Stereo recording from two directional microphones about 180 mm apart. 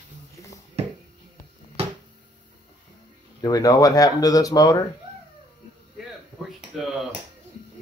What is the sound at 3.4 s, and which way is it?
Speech, 20° left (ahead or behind).